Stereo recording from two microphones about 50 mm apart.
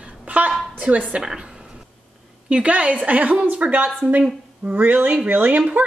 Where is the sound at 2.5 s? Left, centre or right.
Right.